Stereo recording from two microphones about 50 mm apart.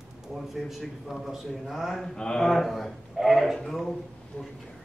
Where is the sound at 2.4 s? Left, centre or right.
Centre.